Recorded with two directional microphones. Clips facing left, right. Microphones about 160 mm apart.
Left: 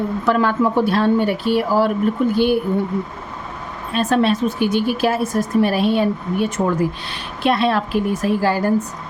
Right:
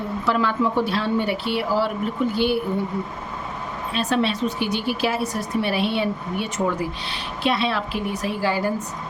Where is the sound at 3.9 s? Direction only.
50° left (ahead or behind).